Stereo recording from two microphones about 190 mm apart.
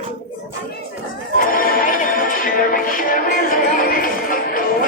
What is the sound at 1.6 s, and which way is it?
Music, 45° left (ahead or behind).